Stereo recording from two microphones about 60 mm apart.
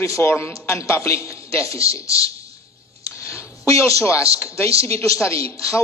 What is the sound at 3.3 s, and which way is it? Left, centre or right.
Speech, left.